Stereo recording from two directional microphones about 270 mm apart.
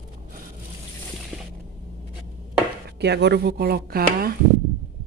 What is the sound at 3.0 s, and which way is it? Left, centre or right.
Speech, right.